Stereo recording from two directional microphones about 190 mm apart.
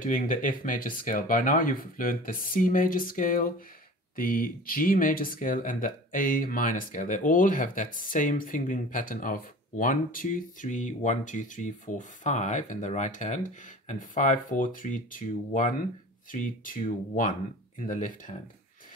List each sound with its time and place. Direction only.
0.0 s speech: 45° left (ahead or behind)